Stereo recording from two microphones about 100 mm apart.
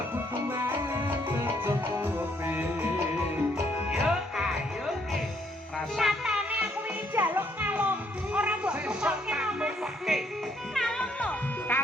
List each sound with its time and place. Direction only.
1.0 s music: 20° right (ahead or behind)
3.8 s music: 5° right (ahead or behind)
6.0 s music: 5° right (ahead or behind)
7.1 s music: 20° right (ahead or behind)
10.8 s music: 10° left (ahead or behind)